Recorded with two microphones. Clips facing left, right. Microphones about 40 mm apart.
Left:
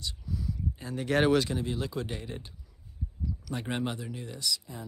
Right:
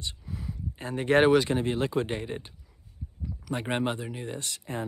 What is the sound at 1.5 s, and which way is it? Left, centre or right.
Speech, right.